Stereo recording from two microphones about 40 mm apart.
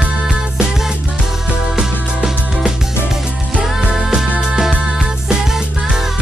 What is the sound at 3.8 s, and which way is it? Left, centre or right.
Music, right.